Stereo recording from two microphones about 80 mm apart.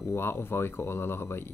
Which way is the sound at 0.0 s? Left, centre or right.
Left.